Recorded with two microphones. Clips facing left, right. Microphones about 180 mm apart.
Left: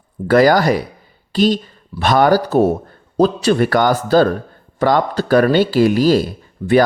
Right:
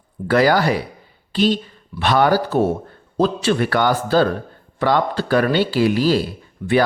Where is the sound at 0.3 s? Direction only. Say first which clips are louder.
Left 4 dB; 45° left (ahead or behind).